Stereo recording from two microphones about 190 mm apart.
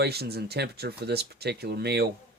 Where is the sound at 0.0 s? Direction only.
55° right (ahead or behind).